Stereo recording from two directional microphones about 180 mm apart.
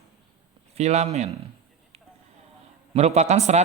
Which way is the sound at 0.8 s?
40° right (ahead or behind).